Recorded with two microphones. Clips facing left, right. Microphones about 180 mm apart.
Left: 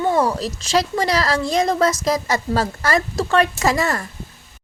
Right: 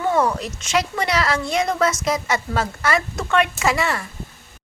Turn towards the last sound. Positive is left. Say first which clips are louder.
# left 2 dB
turn(degrees=40)  # may be behind; listen again after turning